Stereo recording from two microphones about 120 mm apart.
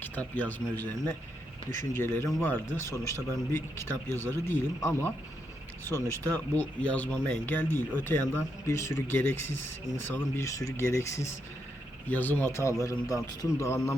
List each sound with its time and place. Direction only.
0.0 s a man's voice: 10° left (ahead or behind)
12.0 s a man's voice: 15° left (ahead or behind)